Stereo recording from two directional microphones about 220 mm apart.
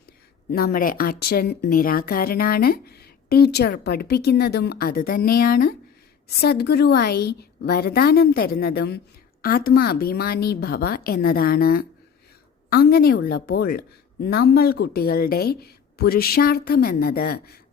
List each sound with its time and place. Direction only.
0.5 s speech: 40° left (ahead or behind)